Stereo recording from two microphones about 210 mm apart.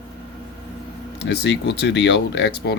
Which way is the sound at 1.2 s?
55° left (ahead or behind).